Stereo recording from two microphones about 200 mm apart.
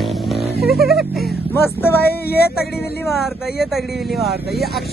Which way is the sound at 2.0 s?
50° left (ahead or behind).